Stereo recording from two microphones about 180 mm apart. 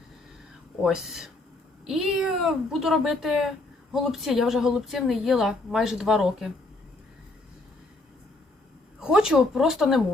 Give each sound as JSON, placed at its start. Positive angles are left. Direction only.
{"t": 0.8, "sound": "a woman's voice", "side_deg": -5}
{"t": 9.0, "sound": "a woman's voice", "side_deg": -5}